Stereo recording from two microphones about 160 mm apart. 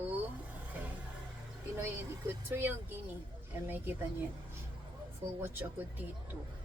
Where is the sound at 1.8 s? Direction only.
15° right (ahead or behind).